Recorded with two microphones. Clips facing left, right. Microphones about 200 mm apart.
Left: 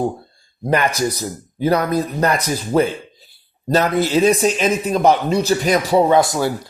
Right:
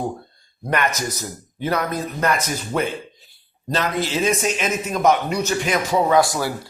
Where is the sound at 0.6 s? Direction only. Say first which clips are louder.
Left 5 dB; 30° left (ahead or behind).